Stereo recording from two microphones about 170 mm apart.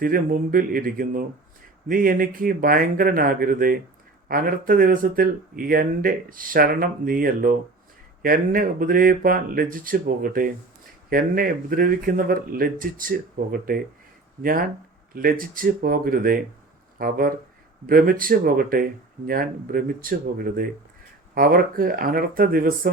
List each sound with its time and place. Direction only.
0.0 s speech: 55° right (ahead or behind)
15.1 s speech: 55° right (ahead or behind)